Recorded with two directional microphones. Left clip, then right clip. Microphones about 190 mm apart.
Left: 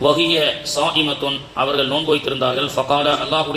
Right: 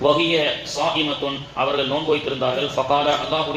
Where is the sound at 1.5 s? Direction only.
25° left (ahead or behind).